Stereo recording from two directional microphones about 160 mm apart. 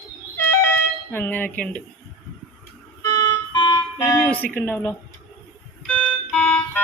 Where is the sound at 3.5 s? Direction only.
25° left (ahead or behind).